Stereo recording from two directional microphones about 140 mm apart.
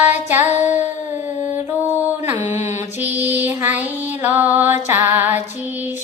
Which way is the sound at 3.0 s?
10° right (ahead or behind).